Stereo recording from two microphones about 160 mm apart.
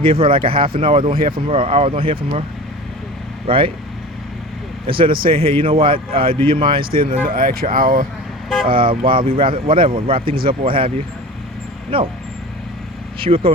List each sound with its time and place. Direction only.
0.0 s speech: 35° right (ahead or behind)
3.4 s speech: 35° right (ahead or behind)
5.3 s speech: 35° right (ahead or behind)
6.9 s speech: 65° right (ahead or behind)
8.6 s speech: 35° right (ahead or behind)
11.9 s speech: 35° right (ahead or behind)
13.1 s speech: 35° right (ahead or behind)